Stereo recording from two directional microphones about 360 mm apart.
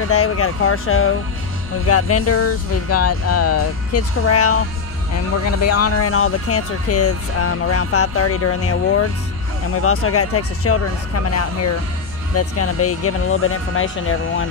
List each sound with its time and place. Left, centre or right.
0.1 s speech: left